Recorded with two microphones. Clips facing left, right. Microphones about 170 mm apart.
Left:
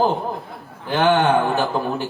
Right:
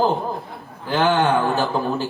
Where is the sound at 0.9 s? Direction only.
20° left (ahead or behind).